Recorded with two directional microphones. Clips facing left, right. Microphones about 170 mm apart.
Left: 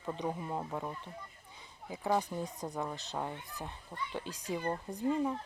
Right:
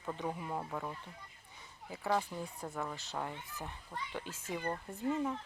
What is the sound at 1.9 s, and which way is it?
Speech, 15° left (ahead or behind).